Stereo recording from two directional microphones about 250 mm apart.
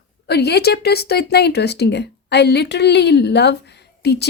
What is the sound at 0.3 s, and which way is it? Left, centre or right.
A woman's voice, left.